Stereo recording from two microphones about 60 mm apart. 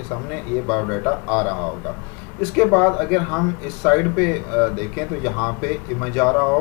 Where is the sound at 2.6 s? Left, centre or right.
Centre.